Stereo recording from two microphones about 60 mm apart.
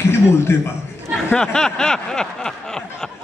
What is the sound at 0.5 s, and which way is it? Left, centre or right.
Speech, left.